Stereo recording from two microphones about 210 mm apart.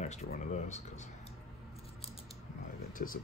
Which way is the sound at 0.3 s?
35° left (ahead or behind).